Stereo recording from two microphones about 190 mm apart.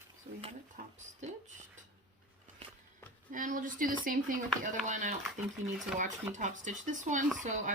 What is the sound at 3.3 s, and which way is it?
Speech, 45° right (ahead or behind).